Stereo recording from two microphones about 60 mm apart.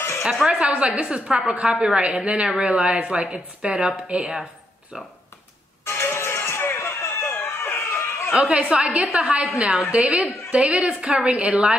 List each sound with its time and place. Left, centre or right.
0.2 s a woman's voice: centre
0.5 s speech: centre
5.9 s music: left
8.4 s speech: centre